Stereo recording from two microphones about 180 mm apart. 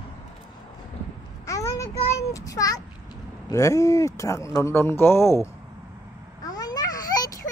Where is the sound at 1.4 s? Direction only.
20° left (ahead or behind).